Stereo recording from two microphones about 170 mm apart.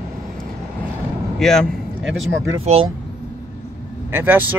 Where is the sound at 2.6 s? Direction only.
35° right (ahead or behind).